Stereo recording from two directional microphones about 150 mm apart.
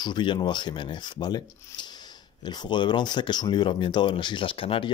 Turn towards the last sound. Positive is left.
turn(degrees=35)  # may be behind; listen again after turning